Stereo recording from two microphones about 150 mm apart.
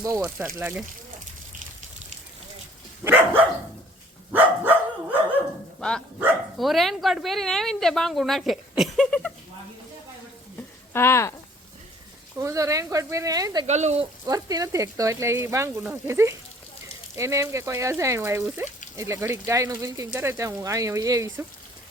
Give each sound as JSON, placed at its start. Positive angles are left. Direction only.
{"t": 0.2, "sound": "speech", "side_deg": -15}
{"t": 3.0, "sound": "dog", "side_deg": -15}
{"t": 6.6, "sound": "speech", "side_deg": 0}
{"t": 10.9, "sound": "speech", "side_deg": 15}
{"t": 12.4, "sound": "speech", "side_deg": -20}
{"t": 13.7, "sound": "speech", "side_deg": -50}
{"t": 14.3, "sound": "speech", "side_deg": -25}